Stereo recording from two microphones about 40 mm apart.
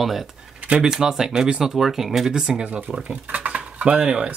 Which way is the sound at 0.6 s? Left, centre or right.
Right.